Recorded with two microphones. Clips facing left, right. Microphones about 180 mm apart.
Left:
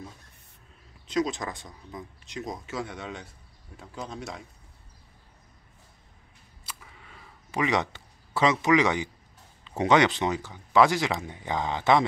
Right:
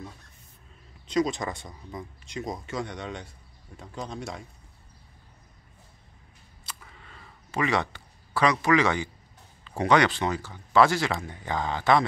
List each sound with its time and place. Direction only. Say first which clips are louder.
1.0 s speech: right 2 dB; centre (ahead or behind)
6.6 s a sound: even; 10° left (ahead or behind)
9.7 s speech: left 1 dB; 20° left (ahead or behind)